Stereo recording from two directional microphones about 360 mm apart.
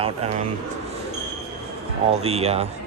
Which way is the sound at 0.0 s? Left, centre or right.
Centre.